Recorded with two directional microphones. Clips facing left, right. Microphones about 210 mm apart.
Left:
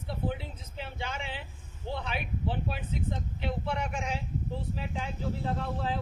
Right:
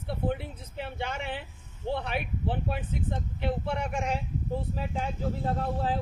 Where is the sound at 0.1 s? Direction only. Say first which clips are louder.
Right 4 dB; 60° right (ahead or behind).